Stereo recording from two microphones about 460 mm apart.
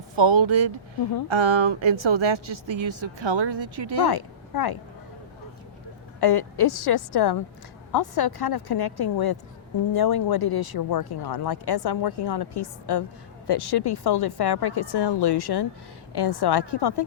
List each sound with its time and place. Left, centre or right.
0.2 s a woman's voice: right
4.0 s speech: left
6.1 s speech: left